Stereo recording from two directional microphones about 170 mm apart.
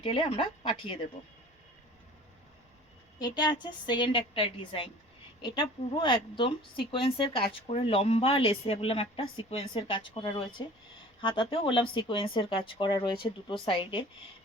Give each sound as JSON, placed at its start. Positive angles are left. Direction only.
{"t": 0.0, "sound": "speech", "side_deg": 30}
{"t": 3.2, "sound": "speech", "side_deg": 25}